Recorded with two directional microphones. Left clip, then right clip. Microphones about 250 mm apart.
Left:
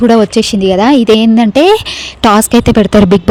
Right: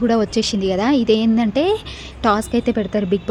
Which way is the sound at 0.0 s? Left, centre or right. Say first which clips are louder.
Left 10 dB; left.